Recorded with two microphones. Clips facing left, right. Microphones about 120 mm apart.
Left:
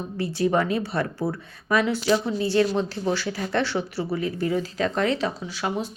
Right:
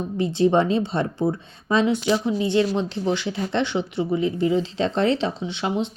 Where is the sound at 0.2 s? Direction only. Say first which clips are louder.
Right 4 dB; 25° right (ahead or behind).